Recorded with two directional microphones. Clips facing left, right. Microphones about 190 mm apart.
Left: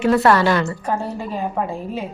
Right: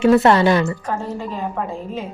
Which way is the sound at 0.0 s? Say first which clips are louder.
Right 2 dB; 25° right (ahead or behind).